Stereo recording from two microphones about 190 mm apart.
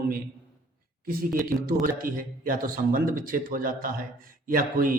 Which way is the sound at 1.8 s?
45° right (ahead or behind).